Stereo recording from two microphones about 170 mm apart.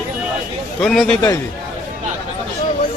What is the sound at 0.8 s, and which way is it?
Speech, 5° left (ahead or behind).